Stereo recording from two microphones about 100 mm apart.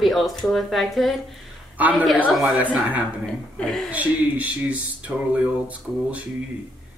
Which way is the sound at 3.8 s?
15° right (ahead or behind).